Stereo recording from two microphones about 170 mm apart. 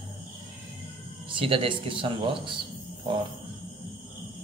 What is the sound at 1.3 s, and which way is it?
Speech, 30° right (ahead or behind).